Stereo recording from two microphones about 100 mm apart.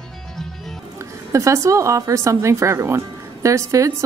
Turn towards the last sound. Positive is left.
turn(degrees=-30)  # may be behind; listen again after turning